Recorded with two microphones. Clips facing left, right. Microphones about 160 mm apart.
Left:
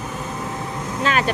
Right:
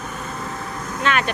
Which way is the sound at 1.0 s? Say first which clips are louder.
Left 1 dB; 35° left (ahead or behind).